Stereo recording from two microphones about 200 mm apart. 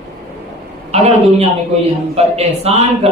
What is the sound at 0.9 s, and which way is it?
Speech, 30° right (ahead or behind).